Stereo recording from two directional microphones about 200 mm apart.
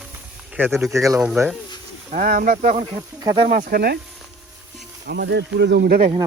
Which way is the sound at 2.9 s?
20° right (ahead or behind).